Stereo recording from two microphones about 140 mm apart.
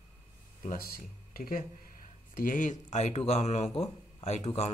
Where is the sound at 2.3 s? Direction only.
70° left (ahead or behind).